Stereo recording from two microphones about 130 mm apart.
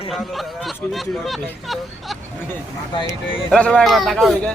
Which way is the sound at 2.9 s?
40° left (ahead or behind).